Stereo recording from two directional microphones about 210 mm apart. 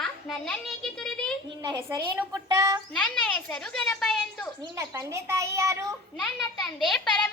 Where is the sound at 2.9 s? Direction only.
5° left (ahead or behind).